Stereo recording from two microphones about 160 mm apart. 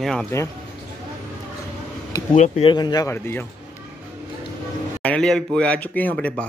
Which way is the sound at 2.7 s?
25° left (ahead or behind).